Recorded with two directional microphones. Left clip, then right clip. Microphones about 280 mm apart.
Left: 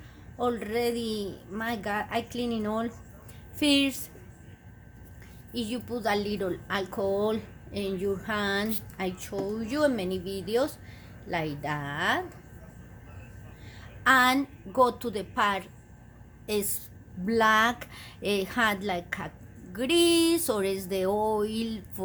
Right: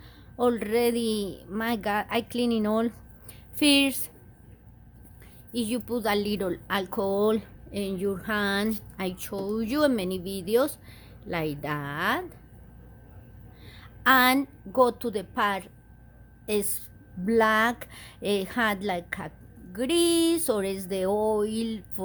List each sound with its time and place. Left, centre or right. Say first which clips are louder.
0.3 s speech: right 4 dB; right
5.5 s a woman's voice: right 4 dB; right
14.0 s a woman's voice: right 1 dB; right